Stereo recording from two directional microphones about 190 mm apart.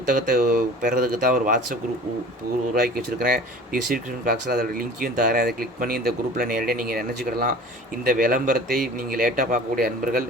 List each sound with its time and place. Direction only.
0.1 s speech: 45° right (ahead or behind)